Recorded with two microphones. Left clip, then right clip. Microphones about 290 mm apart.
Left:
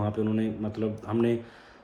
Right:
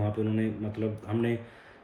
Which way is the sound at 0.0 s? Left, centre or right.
Centre.